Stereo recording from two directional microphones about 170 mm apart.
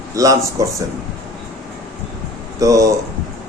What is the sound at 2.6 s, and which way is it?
Speech, 20° right (ahead or behind).